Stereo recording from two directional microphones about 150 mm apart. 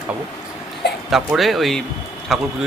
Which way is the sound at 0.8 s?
90° left.